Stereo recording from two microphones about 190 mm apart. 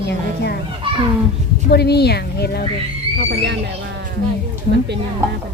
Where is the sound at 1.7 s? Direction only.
60° left (ahead or behind).